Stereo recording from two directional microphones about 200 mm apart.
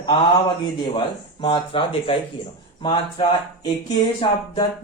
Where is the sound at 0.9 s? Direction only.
25° left (ahead or behind).